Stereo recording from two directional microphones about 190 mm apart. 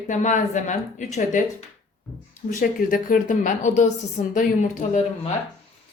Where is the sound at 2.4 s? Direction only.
50° left (ahead or behind).